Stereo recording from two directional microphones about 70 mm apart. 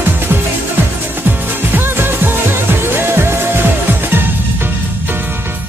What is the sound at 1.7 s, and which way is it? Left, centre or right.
Music, right.